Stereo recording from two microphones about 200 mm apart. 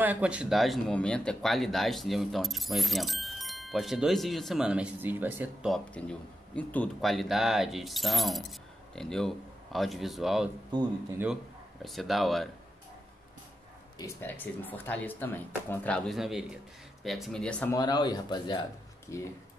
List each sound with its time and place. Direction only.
0.0 s speech: 5° right (ahead or behind)
5.9 s speech: 5° left (ahead or behind)
11.8 s speech: centre (ahead or behind)
13.9 s speech: 10° left (ahead or behind)
17.7 s speech: 20° left (ahead or behind)